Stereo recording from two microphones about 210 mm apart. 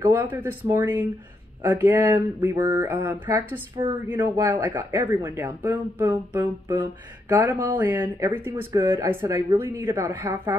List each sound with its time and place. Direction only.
0.0 s speech: 10° right (ahead or behind)
4.6 s speech: 10° right (ahead or behind)